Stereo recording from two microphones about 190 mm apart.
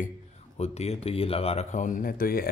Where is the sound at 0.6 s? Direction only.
35° left (ahead or behind); by 2.4 s 50° left (ahead or behind).